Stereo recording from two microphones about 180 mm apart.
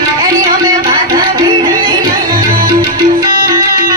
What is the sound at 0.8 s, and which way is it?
Music, 25° right (ahead or behind).